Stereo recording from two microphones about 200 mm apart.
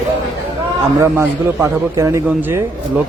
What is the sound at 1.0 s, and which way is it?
A man's voice, 15° right (ahead or behind).